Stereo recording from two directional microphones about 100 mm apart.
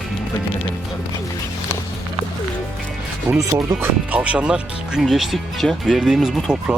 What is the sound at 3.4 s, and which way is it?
Speech, 35° right (ahead or behind).